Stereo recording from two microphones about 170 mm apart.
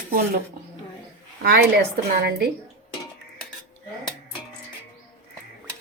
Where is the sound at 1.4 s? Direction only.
75° right (ahead or behind).